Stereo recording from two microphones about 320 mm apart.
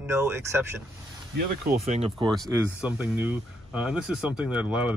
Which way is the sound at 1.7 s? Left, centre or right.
Centre.